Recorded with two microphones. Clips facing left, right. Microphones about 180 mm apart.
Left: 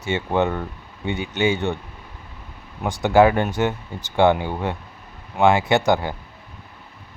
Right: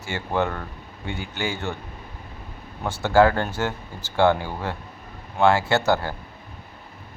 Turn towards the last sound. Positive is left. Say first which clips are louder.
# left 3 dB
turn(degrees=15)  # may be behind; listen again after turning